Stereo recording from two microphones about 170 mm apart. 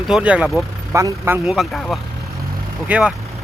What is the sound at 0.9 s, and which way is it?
Speech, 15° right (ahead or behind).